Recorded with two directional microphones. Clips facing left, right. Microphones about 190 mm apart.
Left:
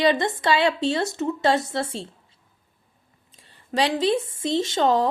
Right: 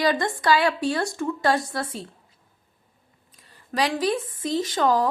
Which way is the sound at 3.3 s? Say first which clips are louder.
Left 2 dB; 25° left (ahead or behind).